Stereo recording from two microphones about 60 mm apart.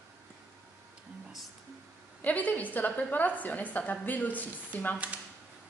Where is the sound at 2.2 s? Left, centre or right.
Left.